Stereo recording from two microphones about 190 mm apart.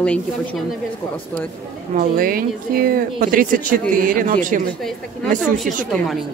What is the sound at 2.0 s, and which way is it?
Speech, 50° right (ahead or behind).